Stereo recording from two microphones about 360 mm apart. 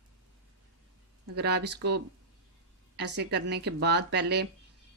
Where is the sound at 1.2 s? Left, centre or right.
Right.